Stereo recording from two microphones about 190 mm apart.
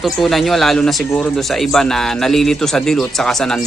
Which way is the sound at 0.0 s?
Centre (ahead or behind).